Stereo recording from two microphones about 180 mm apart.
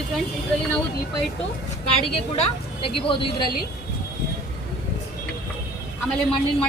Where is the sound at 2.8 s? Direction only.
30° left (ahead or behind).